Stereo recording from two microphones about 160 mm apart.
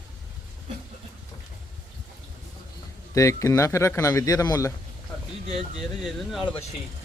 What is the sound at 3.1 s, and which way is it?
Speech, 20° left (ahead or behind).